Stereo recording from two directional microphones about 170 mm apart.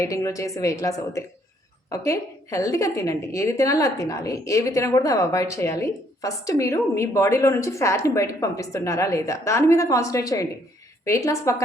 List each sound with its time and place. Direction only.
0.0 s a woman's voice: 20° left (ahead or behind)